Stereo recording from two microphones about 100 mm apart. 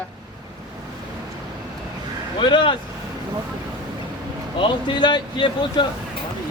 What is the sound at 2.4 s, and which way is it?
Speech, 55° left (ahead or behind).